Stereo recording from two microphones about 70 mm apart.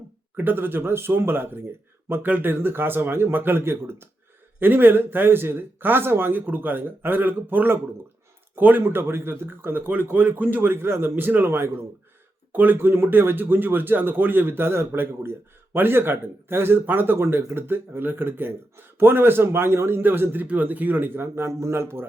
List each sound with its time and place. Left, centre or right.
0.3 s speech: right